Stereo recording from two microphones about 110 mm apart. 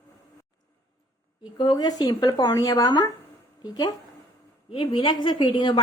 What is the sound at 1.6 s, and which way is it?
Speech, 40° left (ahead or behind).